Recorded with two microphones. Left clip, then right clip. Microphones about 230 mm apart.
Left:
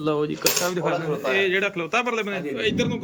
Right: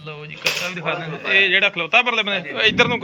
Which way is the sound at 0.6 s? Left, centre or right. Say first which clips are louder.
Left 1 dB; left.